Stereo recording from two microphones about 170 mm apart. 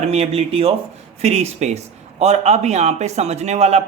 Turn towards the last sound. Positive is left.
turn(degrees=-40)  # may be behind; listen again after turning